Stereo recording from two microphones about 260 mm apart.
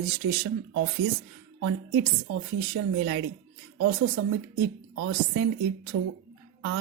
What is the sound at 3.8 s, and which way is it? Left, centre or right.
A woman's voice, right.